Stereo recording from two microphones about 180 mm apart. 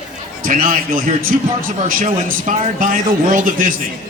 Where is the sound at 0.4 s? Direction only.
50° right (ahead or behind).